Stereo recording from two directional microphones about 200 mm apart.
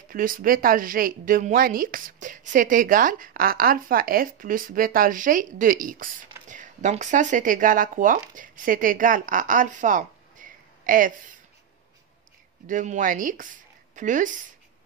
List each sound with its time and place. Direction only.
0.1 s a woman's voice: 45° right (ahead or behind)
12.6 s a woman's voice: 40° right (ahead or behind)